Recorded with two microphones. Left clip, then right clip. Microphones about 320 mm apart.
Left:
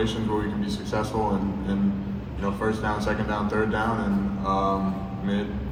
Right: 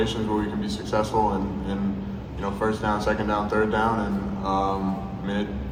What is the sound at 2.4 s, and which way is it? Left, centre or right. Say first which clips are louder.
A man's voice: right 1 dB; right.